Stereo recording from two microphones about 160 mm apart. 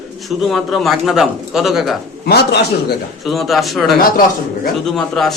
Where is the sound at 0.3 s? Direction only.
Centre (ahead or behind).